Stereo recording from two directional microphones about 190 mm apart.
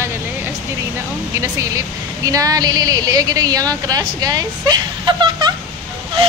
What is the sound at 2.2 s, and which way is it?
A woman's voice, 20° right (ahead or behind).